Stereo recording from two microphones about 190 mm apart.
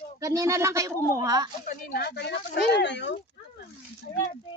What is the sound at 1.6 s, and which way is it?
Speech, 50° left (ahead or behind).